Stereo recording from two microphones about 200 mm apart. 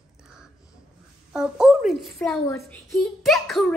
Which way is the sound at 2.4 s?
15° left (ahead or behind).